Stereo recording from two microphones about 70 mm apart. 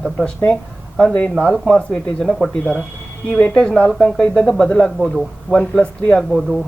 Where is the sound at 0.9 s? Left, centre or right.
Centre.